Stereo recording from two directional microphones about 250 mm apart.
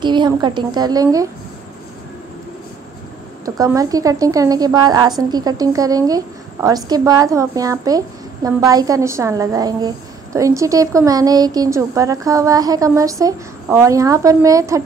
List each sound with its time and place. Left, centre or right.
0.0 s a woman's voice: centre
3.4 s a woman's voice: centre